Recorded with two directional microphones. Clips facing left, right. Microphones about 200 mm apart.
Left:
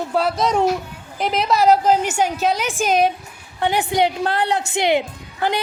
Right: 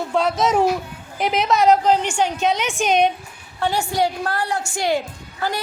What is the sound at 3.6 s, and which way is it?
A woman's voice, 20° left (ahead or behind).